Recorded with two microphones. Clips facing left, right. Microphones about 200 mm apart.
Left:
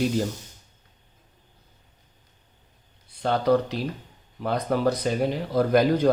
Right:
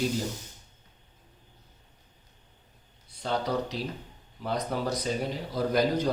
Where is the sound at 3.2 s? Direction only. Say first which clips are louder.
Left 8 dB; 60° left (ahead or behind).